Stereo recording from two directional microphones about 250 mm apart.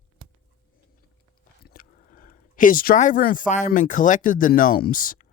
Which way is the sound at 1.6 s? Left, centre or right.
Left.